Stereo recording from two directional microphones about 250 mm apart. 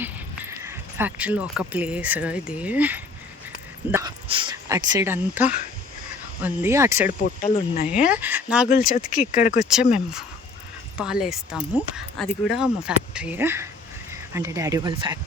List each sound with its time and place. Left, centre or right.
0.0 s speech: centre
3.9 s dog: centre
6.4 s speech: centre
7.4 s speech: left
7.9 s speech: centre
8.9 s speech: left
9.9 s speech: centre